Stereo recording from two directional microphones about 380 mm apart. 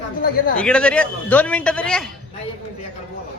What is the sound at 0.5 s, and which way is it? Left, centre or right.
A man's voice, centre.